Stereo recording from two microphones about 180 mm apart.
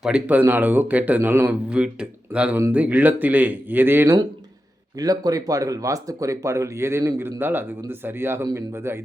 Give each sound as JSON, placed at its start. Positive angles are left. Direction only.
{"t": 0.0, "sound": "speech", "side_deg": -5}